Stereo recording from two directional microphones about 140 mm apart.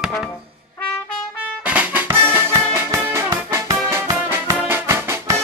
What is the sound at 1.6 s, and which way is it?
Music, 10° right (ahead or behind).